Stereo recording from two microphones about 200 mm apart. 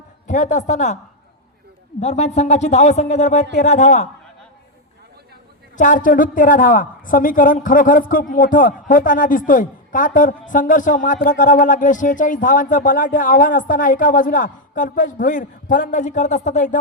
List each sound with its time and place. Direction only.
0.3 s a woman's voice: 40° left (ahead or behind)
2.0 s a woman's voice: 35° left (ahead or behind)
5.7 s a woman's voice: 40° left (ahead or behind)